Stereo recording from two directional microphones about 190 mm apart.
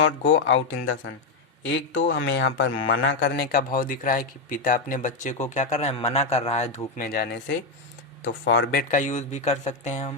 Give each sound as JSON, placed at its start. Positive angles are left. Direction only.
{"t": 0.0, "sound": "a man's voice", "side_deg": 90}
{"t": 8.2, "sound": "speech", "side_deg": 80}
{"t": 8.7, "sound": "speech", "side_deg": 45}